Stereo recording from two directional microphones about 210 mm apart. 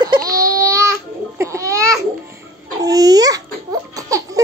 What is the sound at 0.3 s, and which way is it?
Baby cry, 15° right (ahead or behind).